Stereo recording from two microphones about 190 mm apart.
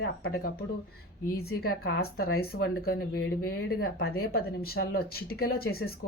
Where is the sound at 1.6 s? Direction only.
55° left (ahead or behind).